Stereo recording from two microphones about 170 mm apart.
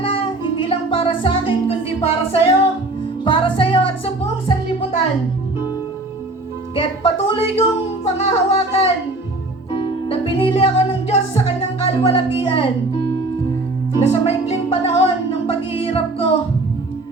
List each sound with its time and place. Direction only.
0.0 s music: 30° left (ahead or behind)
6.7 s music: 30° left (ahead or behind)
10.1 s music: 30° left (ahead or behind)
14.1 s music: 35° left (ahead or behind)